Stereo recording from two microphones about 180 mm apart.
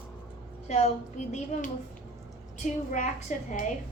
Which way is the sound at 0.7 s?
40° left (ahead or behind).